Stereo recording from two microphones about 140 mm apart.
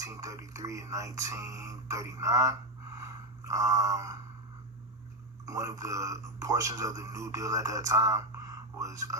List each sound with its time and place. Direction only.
0.0 s speech: 25° right (ahead or behind)
5.5 s speech: 25° right (ahead or behind)